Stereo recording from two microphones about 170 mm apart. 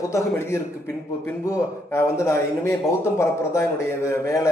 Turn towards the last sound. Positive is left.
turn(degrees=15)  # may be behind; listen again after turning